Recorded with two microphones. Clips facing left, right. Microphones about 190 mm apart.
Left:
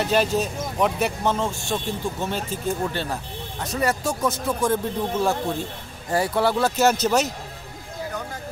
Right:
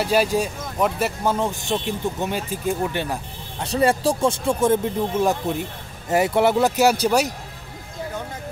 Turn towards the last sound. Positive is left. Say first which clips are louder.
# right 2 dB
turn(degrees=-10)  # may be behind; listen again after turning